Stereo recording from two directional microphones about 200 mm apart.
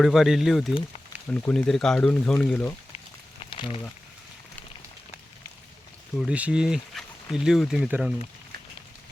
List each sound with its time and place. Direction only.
0.0 s speech: centre (ahead or behind)
3.5 s a sound: 25° left (ahead or behind)
6.1 s speech: 5° right (ahead or behind)